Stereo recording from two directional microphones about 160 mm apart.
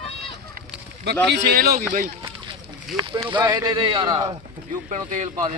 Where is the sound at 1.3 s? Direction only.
90° right.